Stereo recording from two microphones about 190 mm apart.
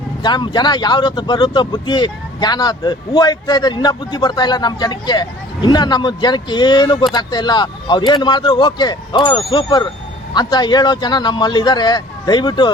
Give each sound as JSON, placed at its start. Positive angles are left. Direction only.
{"t": 0.2, "sound": "speech", "side_deg": 25}